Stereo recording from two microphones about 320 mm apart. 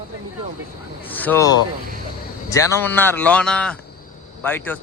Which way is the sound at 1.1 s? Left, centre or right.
Centre.